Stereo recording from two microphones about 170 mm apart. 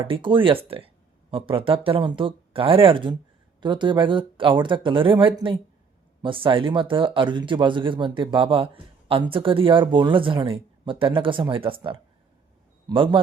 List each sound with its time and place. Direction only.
0.1 s speech: 30° right (ahead or behind)